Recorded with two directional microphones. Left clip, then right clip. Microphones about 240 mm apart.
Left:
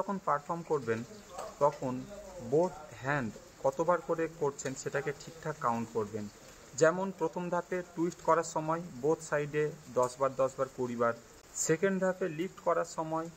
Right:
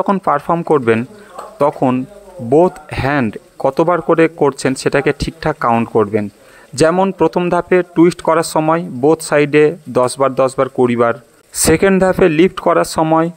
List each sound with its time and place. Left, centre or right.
0.0 s speech: right
2.5 s speech: right